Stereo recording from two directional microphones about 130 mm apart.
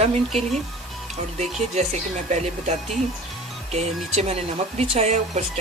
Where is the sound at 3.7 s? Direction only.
55° right (ahead or behind).